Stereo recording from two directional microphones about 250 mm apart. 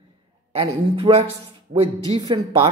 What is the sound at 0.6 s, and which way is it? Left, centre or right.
A woman's voice, right.